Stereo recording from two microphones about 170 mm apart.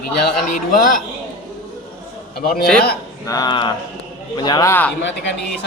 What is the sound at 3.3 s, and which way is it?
Speech, 25° left (ahead or behind).